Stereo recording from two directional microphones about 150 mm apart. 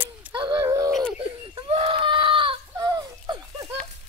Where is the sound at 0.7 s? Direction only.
20° right (ahead or behind).